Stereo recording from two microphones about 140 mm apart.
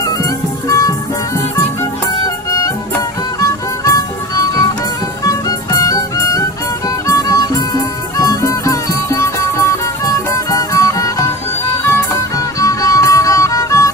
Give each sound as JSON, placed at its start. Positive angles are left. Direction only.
{"t": 0.0, "sound": "music", "side_deg": 25}
{"t": 2.5, "sound": "music", "side_deg": 25}
{"t": 12.5, "sound": "music", "side_deg": 25}